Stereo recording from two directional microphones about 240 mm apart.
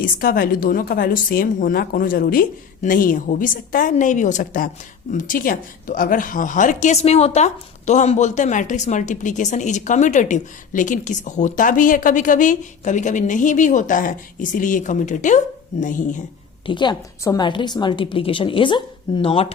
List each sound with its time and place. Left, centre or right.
0.2 s a woman's voice: left
16.6 s a woman's voice: centre